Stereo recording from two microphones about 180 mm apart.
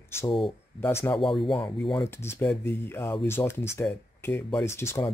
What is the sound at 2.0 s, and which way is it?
Speech, 15° left (ahead or behind).